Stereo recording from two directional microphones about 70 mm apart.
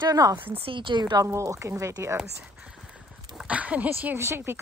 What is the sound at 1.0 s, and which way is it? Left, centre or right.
Speech, right.